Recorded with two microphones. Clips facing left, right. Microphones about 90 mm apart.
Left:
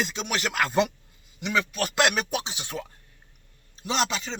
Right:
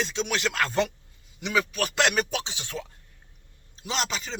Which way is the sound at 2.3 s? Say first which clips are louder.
Left 1 dB; 15° left (ahead or behind).